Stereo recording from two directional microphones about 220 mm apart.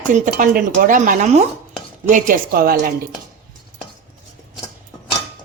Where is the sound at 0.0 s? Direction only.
35° right (ahead or behind).